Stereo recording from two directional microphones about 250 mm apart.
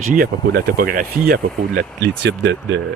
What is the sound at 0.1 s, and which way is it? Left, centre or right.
Speech, right.